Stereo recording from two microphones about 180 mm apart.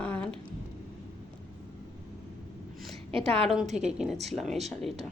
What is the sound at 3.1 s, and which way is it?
Speech, 30° right (ahead or behind).